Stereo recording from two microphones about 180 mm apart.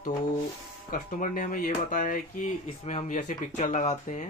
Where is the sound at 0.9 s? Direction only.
50° left (ahead or behind).